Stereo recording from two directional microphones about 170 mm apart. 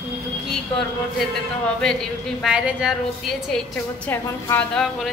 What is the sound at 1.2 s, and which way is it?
Speech, 5° left (ahead or behind).